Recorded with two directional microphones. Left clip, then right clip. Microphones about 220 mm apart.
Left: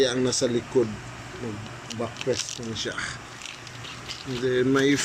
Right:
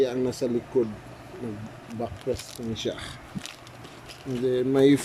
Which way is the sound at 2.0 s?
Centre (ahead or behind).